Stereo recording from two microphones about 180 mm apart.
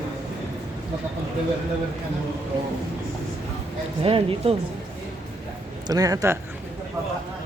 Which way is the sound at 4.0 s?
30° right (ahead or behind).